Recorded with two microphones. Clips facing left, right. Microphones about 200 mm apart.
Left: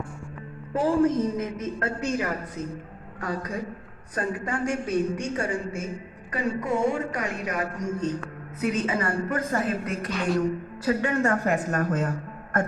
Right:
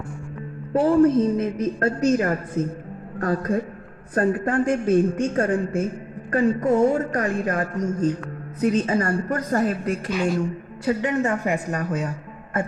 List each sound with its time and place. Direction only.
0.8 s a woman's voice: 35° right (ahead or behind); by 7.7 s 50° right (ahead or behind)
8.6 s a woman's voice: 35° right (ahead or behind)
10.1 s a woman's voice: 5° right (ahead or behind)
10.8 s a woman's voice: 20° right (ahead or behind)